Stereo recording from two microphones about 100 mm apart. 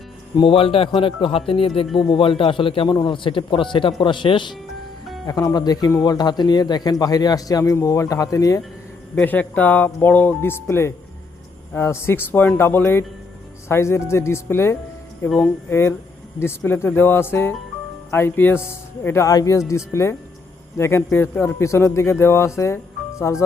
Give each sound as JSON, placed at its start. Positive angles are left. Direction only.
{"t": 0.3, "sound": "speech", "side_deg": 65}
{"t": 0.9, "sound": "speech", "side_deg": 55}
{"t": 2.9, "sound": "speech", "side_deg": 50}
{"t": 5.2, "sound": "speech", "side_deg": 35}
{"t": 9.1, "sound": "speech", "side_deg": 15}